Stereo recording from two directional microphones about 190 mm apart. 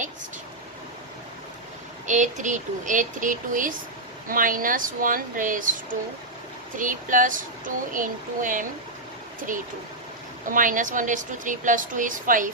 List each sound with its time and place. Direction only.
2.0 s a woman's voice: 40° right (ahead or behind)
10.5 s a woman's voice: 45° right (ahead or behind)